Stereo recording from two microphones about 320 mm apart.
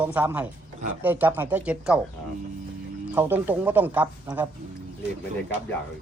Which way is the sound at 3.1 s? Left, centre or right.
Centre.